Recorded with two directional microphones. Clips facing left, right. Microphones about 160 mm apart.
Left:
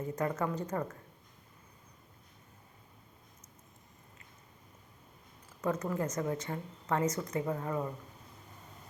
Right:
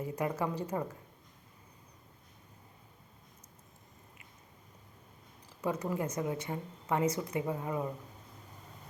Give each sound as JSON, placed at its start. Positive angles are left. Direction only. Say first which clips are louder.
{"t": 0.0, "sound": "speech", "louder": "even", "side_deg": -10}
{"t": 5.6, "sound": "speech", "louder": "left 1 dB", "side_deg": -10}